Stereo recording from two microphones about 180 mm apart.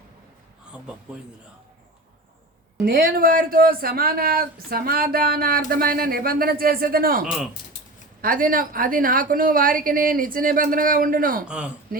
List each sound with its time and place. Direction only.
2.8 s a woman's voice: 55° right (ahead or behind)
11.4 s speech: 5° right (ahead or behind)